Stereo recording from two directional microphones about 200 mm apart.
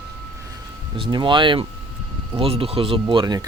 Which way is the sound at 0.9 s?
25° right (ahead or behind).